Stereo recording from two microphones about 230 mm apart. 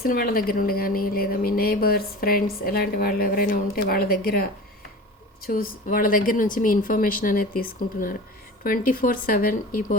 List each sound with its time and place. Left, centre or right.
0.0 s a woman's voice: left
5.5 s a woman's voice: left